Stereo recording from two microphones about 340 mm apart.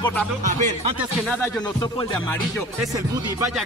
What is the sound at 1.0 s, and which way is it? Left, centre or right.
Speech, centre.